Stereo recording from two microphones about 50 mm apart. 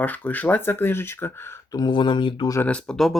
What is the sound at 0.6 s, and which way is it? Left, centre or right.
Speech, left.